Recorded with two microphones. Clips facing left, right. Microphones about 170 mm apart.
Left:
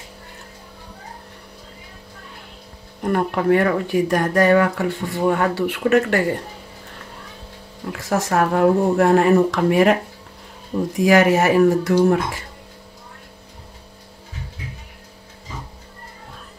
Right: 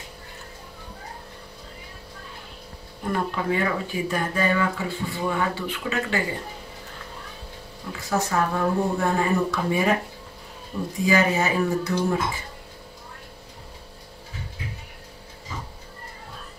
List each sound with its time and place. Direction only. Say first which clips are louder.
3.1 s speech: left 8 dB; 65° left (ahead or behind)
7.9 s speech: left 4 dB; 90° left
11.0 s speech: left 7 dB; 90° left